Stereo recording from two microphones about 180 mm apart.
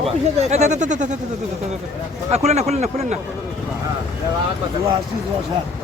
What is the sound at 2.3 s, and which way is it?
Speech, 40° right (ahead or behind).